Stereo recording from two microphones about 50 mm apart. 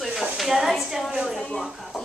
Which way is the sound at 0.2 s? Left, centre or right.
Centre.